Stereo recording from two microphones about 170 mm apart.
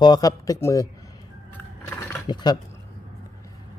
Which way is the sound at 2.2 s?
25° left (ahead or behind).